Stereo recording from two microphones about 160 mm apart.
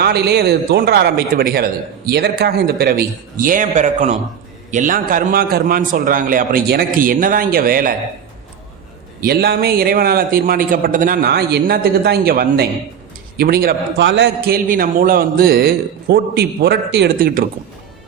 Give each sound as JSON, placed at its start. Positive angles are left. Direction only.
{"t": 0.0, "sound": "a man's voice", "side_deg": -90}
{"t": 9.2, "sound": "a man's voice", "side_deg": -80}